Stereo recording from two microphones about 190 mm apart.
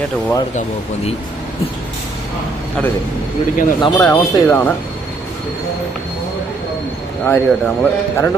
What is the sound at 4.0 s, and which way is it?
Speech, 15° left (ahead or behind).